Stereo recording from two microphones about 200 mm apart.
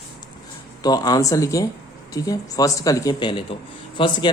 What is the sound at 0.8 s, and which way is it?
A man's voice, 20° left (ahead or behind).